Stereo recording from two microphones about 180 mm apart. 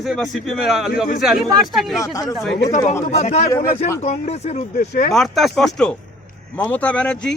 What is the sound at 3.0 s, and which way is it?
Speech, 40° left (ahead or behind).